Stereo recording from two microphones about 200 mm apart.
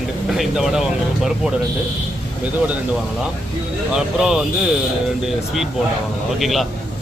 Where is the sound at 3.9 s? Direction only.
5° right (ahead or behind).